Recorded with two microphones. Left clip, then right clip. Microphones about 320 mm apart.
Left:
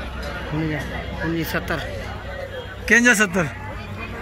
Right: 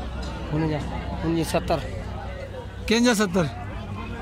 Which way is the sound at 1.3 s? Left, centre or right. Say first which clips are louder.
Right 2 dB; right.